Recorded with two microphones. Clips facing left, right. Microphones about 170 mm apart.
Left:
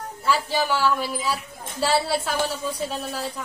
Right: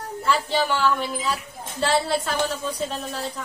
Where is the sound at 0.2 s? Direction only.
5° left (ahead or behind).